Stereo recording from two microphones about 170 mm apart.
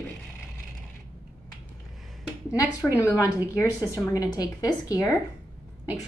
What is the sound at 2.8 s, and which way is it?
Speech, 10° right (ahead or behind).